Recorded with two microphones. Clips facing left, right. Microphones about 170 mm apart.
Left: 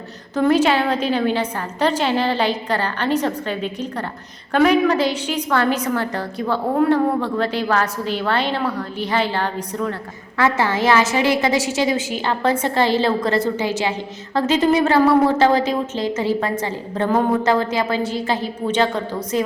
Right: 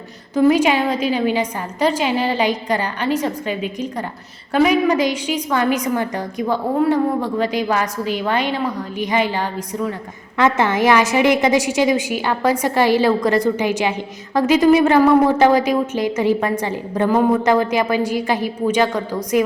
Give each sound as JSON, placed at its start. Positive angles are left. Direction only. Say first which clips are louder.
{"t": 0.3, "sound": "a woman's voice", "louder": "right 2 dB", "side_deg": -10}